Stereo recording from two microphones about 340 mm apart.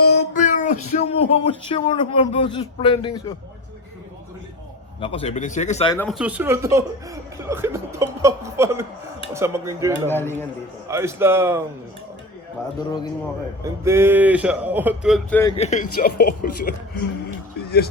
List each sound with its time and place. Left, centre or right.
0.1 s speech: left
4.9 s speech: centre
6.0 s a man's voice: centre
10.1 s speech: centre
10.8 s speech: centre
13.8 s a man's voice: centre
15.5 s speech: centre